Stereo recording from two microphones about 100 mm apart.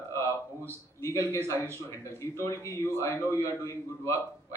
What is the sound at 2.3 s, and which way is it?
A man's voice, 30° left (ahead or behind).